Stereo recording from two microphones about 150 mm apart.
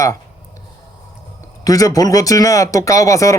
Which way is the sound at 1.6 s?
25° left (ahead or behind).